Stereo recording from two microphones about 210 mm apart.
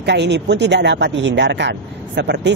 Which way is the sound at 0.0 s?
55° right (ahead or behind).